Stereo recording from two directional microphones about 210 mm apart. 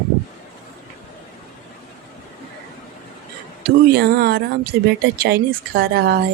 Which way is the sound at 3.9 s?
50° right (ahead or behind).